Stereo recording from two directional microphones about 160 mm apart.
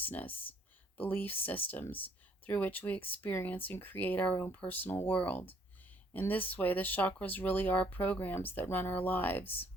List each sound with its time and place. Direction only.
0.0 s speech: 10° left (ahead or behind)
1.9 s speech: 35° left (ahead or behind)
2.5 s speech: 10° left (ahead or behind)